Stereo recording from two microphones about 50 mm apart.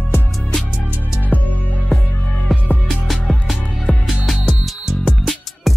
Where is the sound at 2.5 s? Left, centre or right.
Centre.